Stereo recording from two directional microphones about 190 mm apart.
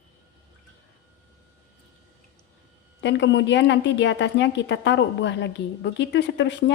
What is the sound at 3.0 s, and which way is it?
A woman's voice, 70° left (ahead or behind).